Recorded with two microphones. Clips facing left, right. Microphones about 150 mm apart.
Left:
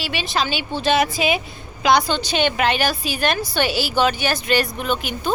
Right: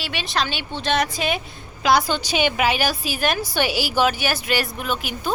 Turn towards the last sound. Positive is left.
turn(degrees=-5)  # may be behind; listen again after turning